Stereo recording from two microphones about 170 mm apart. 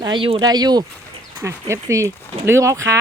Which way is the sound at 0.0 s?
30° right (ahead or behind).